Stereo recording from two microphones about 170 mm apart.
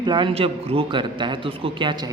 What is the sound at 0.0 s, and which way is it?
A man's voice, 25° right (ahead or behind).